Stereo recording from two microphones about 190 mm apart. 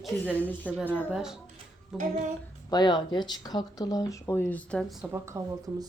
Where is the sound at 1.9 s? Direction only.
40° right (ahead or behind).